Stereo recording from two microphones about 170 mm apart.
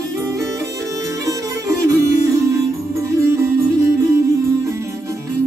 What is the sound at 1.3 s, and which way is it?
Music, 20° right (ahead or behind).